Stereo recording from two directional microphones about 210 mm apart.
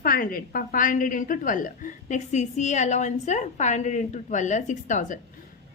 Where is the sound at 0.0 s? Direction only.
45° left (ahead or behind).